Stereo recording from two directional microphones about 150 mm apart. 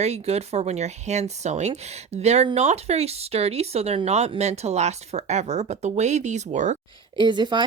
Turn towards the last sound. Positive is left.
turn(degrees=-30)  # may be behind; listen again after turning